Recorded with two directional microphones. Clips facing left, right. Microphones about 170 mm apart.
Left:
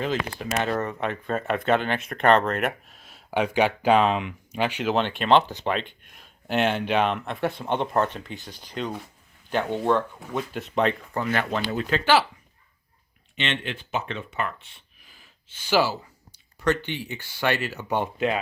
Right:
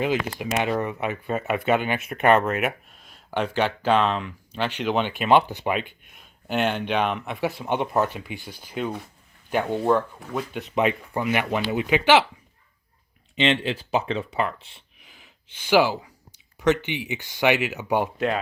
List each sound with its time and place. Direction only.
0.0 s speech: 10° right (ahead or behind)
13.6 s speech: 35° right (ahead or behind)
15.1 s a sound: 15° right (ahead or behind)
16.6 s speech: 15° right (ahead or behind)